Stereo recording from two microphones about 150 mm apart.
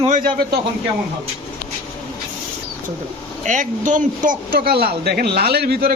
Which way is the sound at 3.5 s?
55° right (ahead or behind).